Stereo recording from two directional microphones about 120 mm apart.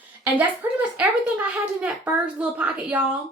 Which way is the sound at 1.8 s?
10° right (ahead or behind).